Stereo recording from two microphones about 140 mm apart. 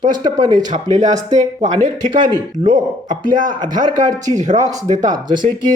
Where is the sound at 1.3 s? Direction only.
55° right (ahead or behind).